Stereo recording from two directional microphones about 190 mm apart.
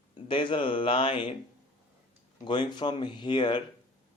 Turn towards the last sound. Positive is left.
turn(degrees=25)  # may be behind; listen again after turning